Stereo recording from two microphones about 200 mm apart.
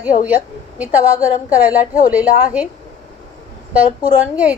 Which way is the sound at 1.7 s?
40° left (ahead or behind).